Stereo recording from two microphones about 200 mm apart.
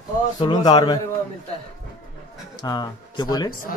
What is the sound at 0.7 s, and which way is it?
Speech, 20° left (ahead or behind).